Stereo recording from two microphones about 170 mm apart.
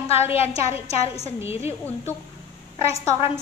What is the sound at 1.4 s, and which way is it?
Speech, 15° right (ahead or behind).